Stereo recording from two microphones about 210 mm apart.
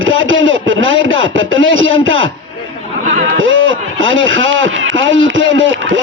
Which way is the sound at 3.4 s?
65° right (ahead or behind).